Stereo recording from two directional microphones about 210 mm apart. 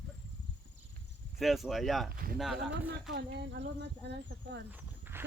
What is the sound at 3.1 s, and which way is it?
Speech, 50° right (ahead or behind).